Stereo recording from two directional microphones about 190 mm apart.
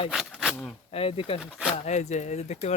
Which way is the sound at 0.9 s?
30° left (ahead or behind).